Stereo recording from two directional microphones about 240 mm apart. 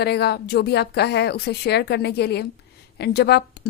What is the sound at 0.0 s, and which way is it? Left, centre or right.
Speech, left.